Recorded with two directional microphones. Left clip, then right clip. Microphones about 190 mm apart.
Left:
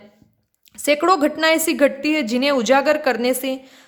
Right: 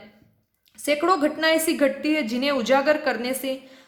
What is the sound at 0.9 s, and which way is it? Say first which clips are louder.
A woman's voice: left 5 dB; 35° left (ahead or behind).